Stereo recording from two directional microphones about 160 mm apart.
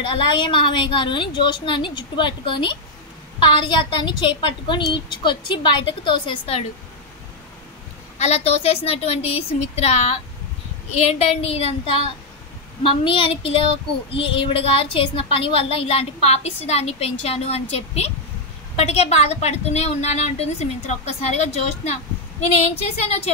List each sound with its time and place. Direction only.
0.1 s a woman's voice: 30° left (ahead or behind)
8.2 s a woman's voice: 40° left (ahead or behind)
12.8 s a woman's voice: 30° left (ahead or behind)